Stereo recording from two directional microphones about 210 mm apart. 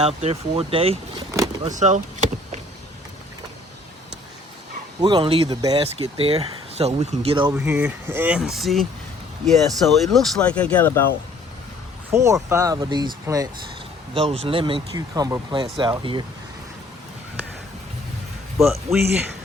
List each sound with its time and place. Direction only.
0.0 s speech: 30° right (ahead or behind)
4.9 s speech: 20° right (ahead or behind)
7.5 s speech: 10° right (ahead or behind); by 10.9 s 5° left (ahead or behind)
12.1 s speech: 15° right (ahead or behind)
14.1 s speech: 25° right (ahead or behind)
18.6 s speech: centre (ahead or behind)